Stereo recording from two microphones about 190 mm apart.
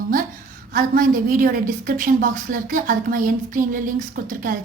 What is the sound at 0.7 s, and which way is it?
Speech, 45° right (ahead or behind).